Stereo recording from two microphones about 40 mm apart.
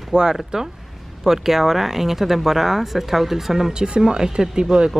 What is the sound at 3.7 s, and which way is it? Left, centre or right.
Speech, right.